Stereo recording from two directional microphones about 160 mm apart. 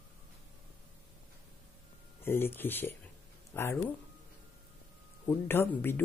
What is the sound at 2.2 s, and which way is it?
Speech, 15° left (ahead or behind).